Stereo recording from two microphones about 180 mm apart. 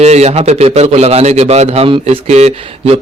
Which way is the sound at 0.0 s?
35° right (ahead or behind).